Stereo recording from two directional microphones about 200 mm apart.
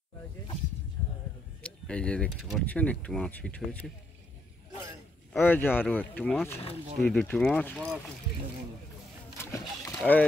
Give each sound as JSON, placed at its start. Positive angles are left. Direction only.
{"t": 1.6, "sound": "speech", "side_deg": 5}
{"t": 5.3, "sound": "speech", "side_deg": 10}
{"t": 6.5, "sound": "speech", "side_deg": 30}
{"t": 7.0, "sound": "speech", "side_deg": 5}
{"t": 9.4, "sound": "a sound", "side_deg": 10}